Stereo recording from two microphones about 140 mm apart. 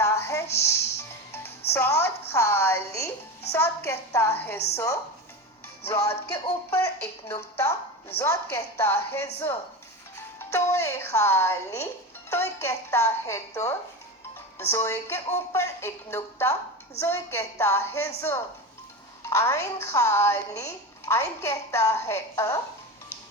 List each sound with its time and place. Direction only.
0.0 s music: 20° left (ahead or behind)
3.5 s a woman's voice: 20° left (ahead or behind)
6.1 s a woman's voice: 20° left (ahead or behind)